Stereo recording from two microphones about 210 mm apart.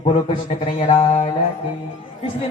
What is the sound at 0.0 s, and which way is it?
Mantra, 30° left (ahead or behind).